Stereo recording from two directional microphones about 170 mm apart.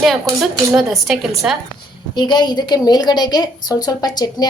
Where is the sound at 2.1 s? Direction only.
25° left (ahead or behind).